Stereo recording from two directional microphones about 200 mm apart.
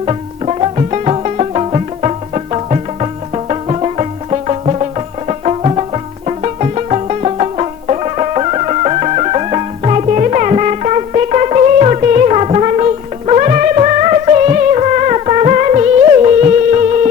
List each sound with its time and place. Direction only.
0.0 s music: 30° right (ahead or behind)